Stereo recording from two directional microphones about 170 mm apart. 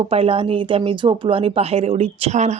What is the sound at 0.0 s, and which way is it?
Speech, 35° right (ahead or behind).